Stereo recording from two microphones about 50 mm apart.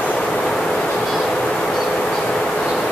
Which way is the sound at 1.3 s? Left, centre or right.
Centre.